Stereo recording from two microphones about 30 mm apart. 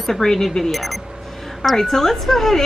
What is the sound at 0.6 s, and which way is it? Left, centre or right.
A woman's voice, centre.